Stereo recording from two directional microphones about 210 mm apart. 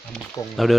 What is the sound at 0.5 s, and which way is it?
Speech, centre (ahead or behind).